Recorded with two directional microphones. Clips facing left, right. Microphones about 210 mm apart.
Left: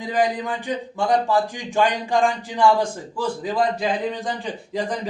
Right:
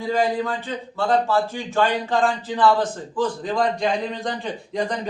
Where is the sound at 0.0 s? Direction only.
15° left (ahead or behind).